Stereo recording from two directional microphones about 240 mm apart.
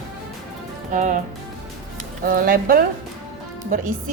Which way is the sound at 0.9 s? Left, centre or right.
Right.